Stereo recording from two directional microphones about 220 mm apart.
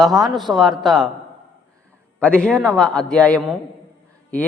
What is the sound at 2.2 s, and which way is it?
A man's voice, 5° left (ahead or behind).